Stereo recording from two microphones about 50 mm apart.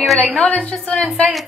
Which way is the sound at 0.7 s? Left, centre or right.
Left.